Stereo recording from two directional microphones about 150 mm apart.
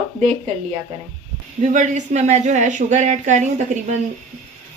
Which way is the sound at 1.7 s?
55° right (ahead or behind).